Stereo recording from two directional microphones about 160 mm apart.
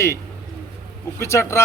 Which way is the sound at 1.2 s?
15° left (ahead or behind).